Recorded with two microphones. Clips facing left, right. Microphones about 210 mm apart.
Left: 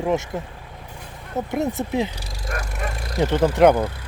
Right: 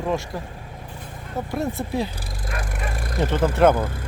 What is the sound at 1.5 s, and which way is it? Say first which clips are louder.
Speech: left 2 dB; 20° left (ahead or behind).